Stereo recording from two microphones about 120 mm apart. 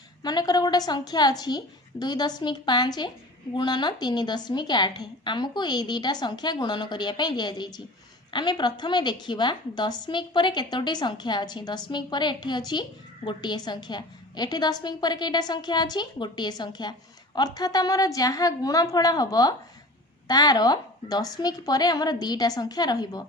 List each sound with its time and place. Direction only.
0.2 s a woman's voice: 35° left (ahead or behind)